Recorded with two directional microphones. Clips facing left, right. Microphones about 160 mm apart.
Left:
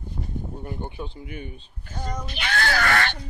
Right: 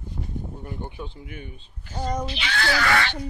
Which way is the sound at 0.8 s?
30° left (ahead or behind).